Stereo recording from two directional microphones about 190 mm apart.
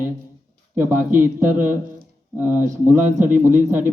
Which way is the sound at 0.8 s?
10° right (ahead or behind).